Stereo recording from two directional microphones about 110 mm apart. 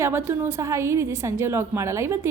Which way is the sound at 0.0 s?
20° right (ahead or behind).